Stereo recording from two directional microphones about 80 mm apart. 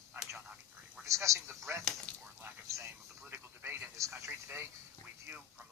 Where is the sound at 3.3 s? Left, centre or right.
Right.